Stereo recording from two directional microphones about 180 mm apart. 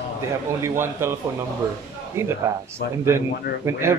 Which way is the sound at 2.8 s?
70° left (ahead or behind).